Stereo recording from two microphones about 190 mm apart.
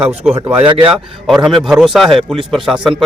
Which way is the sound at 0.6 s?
30° right (ahead or behind).